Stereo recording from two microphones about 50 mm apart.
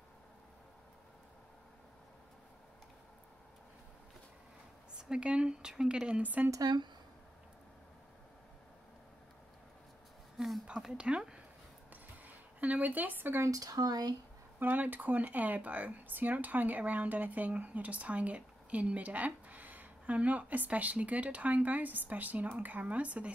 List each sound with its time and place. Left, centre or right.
4.9 s speech: centre
6.2 s speech: right
10.3 s a sound: centre
10.9 s speech: right
11.9 s zipper: right
14.6 s speech: right